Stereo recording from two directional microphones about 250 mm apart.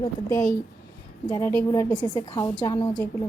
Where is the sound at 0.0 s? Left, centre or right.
Centre.